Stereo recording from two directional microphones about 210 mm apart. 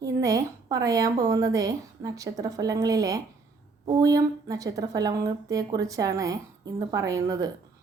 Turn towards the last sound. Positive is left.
turn(degrees=-15)  # may be behind; listen again after turning